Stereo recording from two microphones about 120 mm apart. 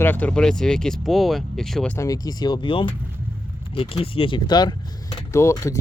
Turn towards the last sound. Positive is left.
turn(degrees=25)  # may be behind; listen again after turning